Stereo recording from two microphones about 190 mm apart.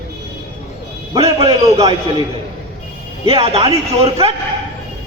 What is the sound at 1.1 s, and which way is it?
Speech, 30° right (ahead or behind).